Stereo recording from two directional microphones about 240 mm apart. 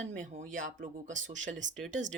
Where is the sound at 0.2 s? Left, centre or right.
Right.